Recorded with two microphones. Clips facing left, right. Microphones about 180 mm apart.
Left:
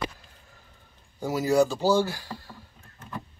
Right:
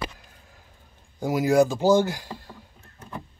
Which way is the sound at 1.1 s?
15° right (ahead or behind).